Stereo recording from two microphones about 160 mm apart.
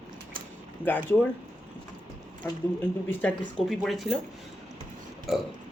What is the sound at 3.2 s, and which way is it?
Speech, 5° left (ahead or behind).